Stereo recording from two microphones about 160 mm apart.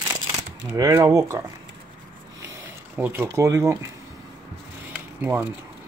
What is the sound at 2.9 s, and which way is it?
Speech, 10° right (ahead or behind).